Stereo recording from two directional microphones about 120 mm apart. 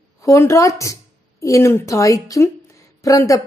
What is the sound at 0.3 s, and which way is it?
A woman's voice, 25° left (ahead or behind).